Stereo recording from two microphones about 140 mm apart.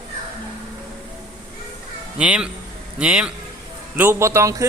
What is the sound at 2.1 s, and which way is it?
Speech, 10° right (ahead or behind).